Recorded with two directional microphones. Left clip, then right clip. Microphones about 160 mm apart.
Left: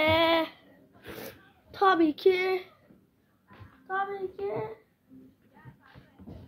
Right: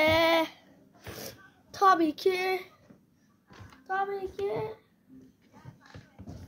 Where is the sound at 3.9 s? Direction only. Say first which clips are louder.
Even; 30° right (ahead or behind).